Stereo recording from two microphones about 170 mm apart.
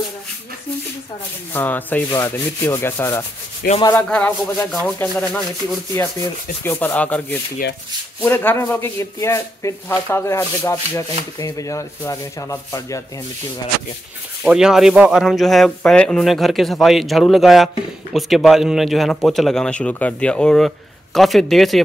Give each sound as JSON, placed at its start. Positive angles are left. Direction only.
{"t": 1.5, "sound": "speech", "side_deg": 10}
{"t": 6.6, "sound": "speech", "side_deg": 10}
{"t": 14.4, "sound": "speech", "side_deg": -5}